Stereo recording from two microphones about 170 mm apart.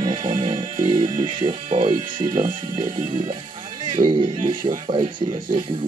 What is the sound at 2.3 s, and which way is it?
Speech, 50° right (ahead or behind).